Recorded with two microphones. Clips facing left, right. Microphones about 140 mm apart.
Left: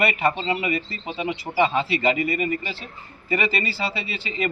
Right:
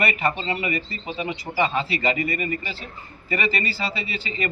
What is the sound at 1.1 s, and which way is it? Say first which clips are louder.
Speech: left 2 dB; 20° left (ahead or behind).